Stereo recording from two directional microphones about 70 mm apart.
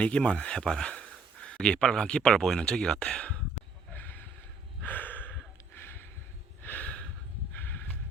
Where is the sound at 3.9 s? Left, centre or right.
Left.